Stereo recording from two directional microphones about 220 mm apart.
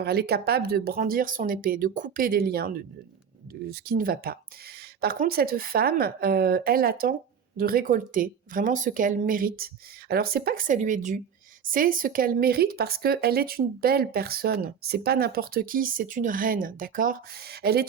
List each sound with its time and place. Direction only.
0.0 s speech: 45° right (ahead or behind)